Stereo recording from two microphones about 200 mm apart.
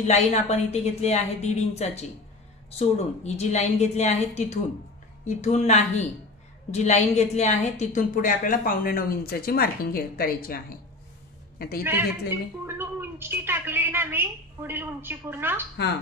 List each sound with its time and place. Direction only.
0.0 s a woman's voice: 35° left (ahead or behind)
11.5 s a sound: 50° left (ahead or behind)
11.8 s a man's voice: 10° right (ahead or behind)